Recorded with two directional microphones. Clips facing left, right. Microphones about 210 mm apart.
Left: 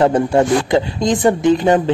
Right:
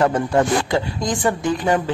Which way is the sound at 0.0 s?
30° left (ahead or behind).